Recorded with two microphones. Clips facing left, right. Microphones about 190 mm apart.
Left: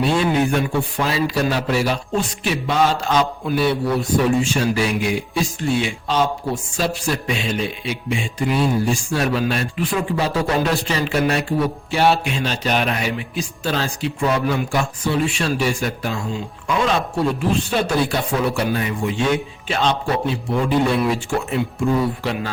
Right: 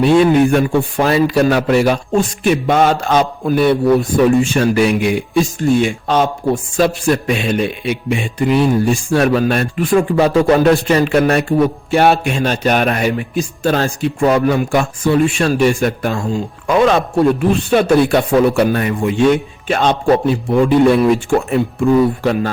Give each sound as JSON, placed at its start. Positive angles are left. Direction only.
{"t": 0.0, "sound": "a man's voice", "side_deg": -55}
{"t": 5.4, "sound": "a man's voice", "side_deg": -50}